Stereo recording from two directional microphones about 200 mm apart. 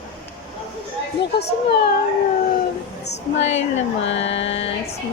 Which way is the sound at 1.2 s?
55° left (ahead or behind).